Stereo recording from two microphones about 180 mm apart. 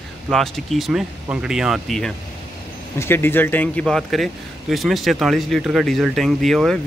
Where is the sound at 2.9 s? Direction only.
15° left (ahead or behind).